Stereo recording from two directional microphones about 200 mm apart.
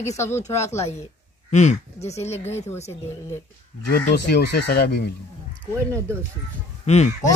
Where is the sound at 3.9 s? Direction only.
55° left (ahead or behind).